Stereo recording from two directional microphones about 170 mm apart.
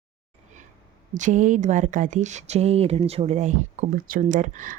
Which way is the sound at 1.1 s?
45° right (ahead or behind).